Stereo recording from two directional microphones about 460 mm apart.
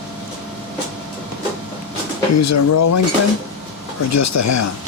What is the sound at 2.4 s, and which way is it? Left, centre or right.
Speech, left.